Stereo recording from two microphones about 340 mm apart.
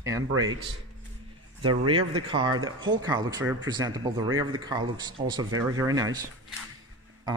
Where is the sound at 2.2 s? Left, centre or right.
Centre.